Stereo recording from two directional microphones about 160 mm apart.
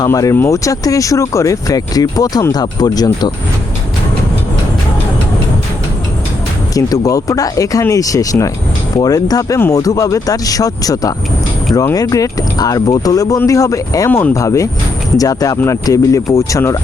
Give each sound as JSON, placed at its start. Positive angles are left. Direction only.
{"t": 0.0, "sound": "speech", "side_deg": 20}
{"t": 6.7, "sound": "speech", "side_deg": 20}